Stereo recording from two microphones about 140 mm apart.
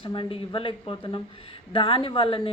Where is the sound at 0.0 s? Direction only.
35° left (ahead or behind).